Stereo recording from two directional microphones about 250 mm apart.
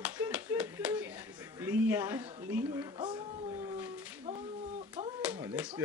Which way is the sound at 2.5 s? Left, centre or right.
Centre.